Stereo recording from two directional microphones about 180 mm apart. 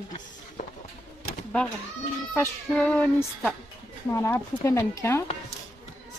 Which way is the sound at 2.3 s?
10° left (ahead or behind).